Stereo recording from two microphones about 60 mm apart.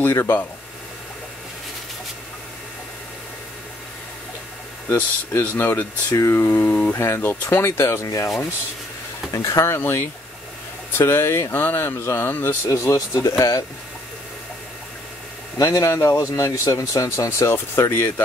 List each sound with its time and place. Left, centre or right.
0.0 s speech: left
4.8 s speech: left
6.1 s speech: left
9.3 s speech: left
9.7 s speech: left
12.6 s speech: left
12.9 s speech: left
15.6 s speech: left
17.7 s speech: left